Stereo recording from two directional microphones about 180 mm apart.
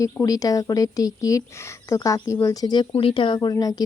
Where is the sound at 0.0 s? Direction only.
20° left (ahead or behind).